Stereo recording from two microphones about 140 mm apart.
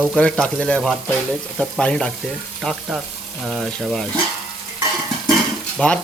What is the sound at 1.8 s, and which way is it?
Frying, 5° left (ahead or behind).